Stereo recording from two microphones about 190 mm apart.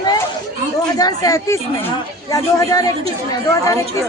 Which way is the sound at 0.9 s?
20° left (ahead or behind).